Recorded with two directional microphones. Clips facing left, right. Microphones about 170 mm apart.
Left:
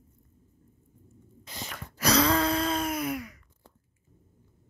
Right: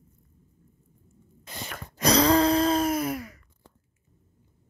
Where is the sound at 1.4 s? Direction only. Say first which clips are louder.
Right 2 dB; 50° right (ahead or behind).